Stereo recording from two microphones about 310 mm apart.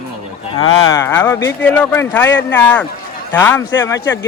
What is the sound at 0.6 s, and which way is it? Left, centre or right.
Speech, centre.